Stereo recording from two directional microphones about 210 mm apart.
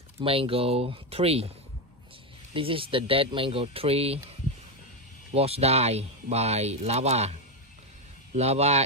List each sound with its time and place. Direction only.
0.2 s speech: 25° right (ahead or behind)
2.5 s speech: 25° right (ahead or behind)
5.3 s speech: 30° right (ahead or behind)
8.4 s speech: 30° right (ahead or behind)